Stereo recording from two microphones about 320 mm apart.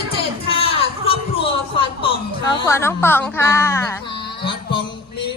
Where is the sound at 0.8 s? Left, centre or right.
Centre.